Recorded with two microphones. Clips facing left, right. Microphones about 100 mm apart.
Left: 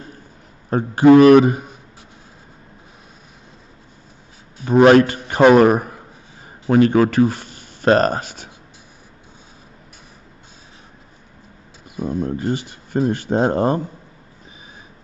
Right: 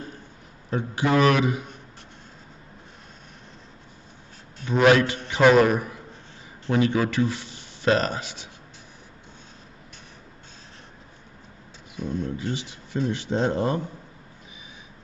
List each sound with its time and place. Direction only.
0.7 s speech: 45° left (ahead or behind)
4.6 s speech: 5° left (ahead or behind)
4.9 s speech: 45° left (ahead or behind)
12.0 s speech: 45° left (ahead or behind)